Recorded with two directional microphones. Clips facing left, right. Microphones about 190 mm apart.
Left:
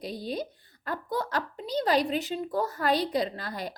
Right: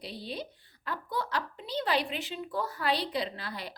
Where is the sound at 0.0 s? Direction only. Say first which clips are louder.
Left 6 dB; 45° left (ahead or behind).